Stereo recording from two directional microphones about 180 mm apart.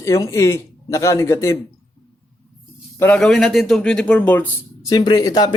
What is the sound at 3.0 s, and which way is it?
A man's voice, 5° left (ahead or behind).